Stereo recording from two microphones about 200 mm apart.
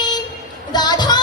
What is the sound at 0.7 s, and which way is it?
Music, 20° left (ahead or behind).